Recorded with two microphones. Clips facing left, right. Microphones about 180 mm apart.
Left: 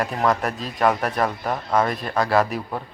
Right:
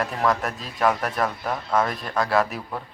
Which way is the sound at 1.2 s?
20° left (ahead or behind).